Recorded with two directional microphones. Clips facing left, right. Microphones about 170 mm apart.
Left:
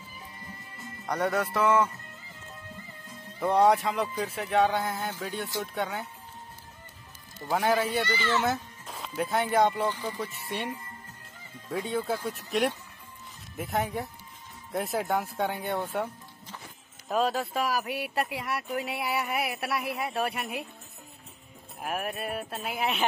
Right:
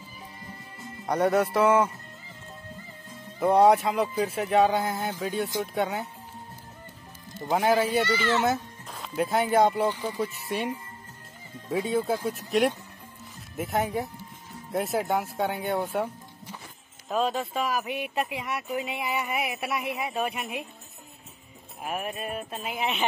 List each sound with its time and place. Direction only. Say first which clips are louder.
1.0 s music: right 5 dB; 20° right (ahead or behind)
3.4 s speech: right 3 dB; 20° right (ahead or behind)
3.8 s speech: right 4 dB; 5° right (ahead or behind)
4.8 s speech: right 3 dB; 20° right (ahead or behind)
7.5 s speech: right 3 dB; 5° right (ahead or behind)
8.5 s speech: right 3 dB; centre (ahead or behind)
10.4 s speech: right 4 dB; centre (ahead or behind)
11.7 s speech: right 4 dB; 10° right (ahead or behind)
13.6 s speech: right 3 dB; centre (ahead or behind)
15.9 s music: right 3 dB; centre (ahead or behind)
17.1 s speech: even; 5° left (ahead or behind)
21.8 s speech: even; centre (ahead or behind)